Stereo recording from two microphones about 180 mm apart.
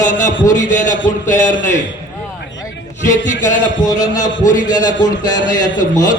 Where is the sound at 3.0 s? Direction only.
45° left (ahead or behind).